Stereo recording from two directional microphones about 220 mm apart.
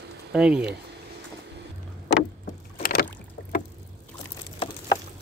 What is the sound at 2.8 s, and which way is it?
Rowboat, 40° left (ahead or behind).